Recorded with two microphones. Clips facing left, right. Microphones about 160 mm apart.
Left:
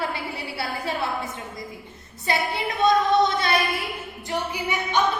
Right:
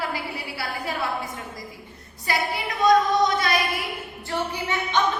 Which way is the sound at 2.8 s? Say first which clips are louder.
Even; 25° left (ahead or behind).